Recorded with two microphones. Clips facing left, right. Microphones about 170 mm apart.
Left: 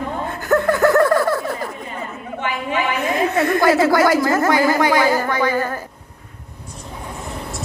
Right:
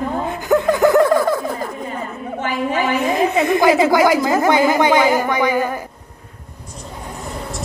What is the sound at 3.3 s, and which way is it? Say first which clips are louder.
Speech: right 1 dB; 15° right (ahead or behind).